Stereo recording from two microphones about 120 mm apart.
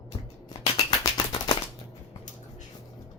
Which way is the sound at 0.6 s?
35° left (ahead or behind).